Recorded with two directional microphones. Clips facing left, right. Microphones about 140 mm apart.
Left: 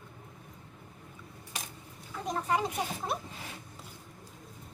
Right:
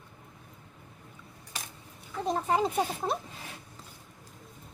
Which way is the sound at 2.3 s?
30° right (ahead or behind).